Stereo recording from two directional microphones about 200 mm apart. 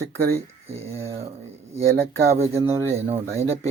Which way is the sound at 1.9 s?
15° right (ahead or behind).